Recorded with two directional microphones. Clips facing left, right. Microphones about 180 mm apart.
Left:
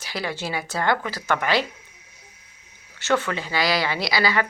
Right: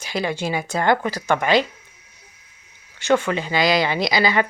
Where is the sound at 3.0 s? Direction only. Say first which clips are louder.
Right 4 dB; 15° right (ahead or behind).